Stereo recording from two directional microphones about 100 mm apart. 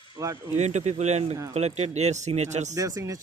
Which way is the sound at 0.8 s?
90° right.